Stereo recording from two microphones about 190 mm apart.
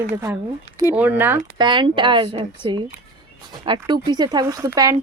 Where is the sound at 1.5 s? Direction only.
25° right (ahead or behind).